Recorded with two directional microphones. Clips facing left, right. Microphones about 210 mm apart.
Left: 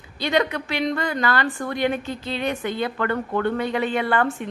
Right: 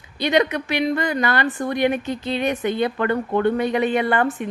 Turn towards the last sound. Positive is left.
turn(degrees=-20)  # may be behind; listen again after turning